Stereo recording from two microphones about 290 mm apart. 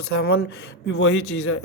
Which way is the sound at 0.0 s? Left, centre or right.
Left.